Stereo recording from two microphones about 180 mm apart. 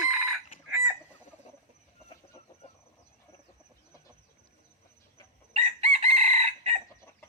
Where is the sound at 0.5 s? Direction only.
50° left (ahead or behind).